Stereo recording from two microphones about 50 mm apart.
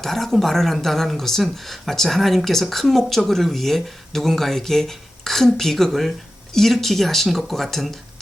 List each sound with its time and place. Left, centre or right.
0.0 s speech: centre